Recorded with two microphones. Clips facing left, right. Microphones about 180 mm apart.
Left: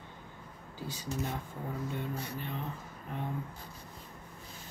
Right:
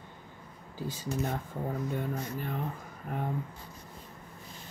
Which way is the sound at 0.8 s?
50° right (ahead or behind).